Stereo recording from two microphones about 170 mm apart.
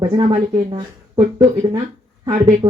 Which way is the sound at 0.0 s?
20° right (ahead or behind).